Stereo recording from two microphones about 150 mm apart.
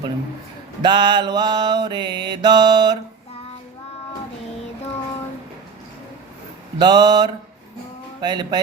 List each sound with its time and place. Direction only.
0.8 s mantra: 30° right (ahead or behind)
6.7 s mantra: 30° right (ahead or behind)